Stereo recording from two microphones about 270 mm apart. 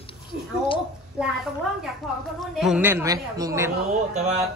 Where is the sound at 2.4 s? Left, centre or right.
Centre.